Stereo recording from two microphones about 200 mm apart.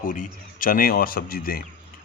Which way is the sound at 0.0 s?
45° left (ahead or behind).